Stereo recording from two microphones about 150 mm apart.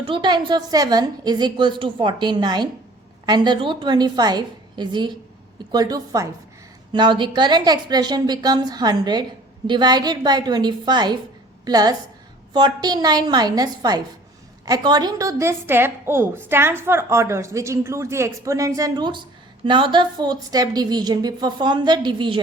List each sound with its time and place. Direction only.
0.0 s a woman's voice: 35° right (ahead or behind)